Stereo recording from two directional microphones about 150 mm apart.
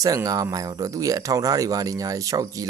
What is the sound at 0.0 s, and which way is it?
Speech, 25° right (ahead or behind).